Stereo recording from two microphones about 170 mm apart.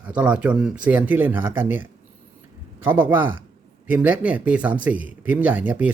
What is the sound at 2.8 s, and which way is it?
Speech, 10° right (ahead or behind).